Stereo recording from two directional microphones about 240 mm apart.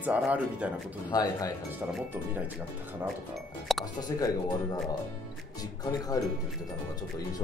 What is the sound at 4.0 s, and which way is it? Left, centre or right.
Speech, centre.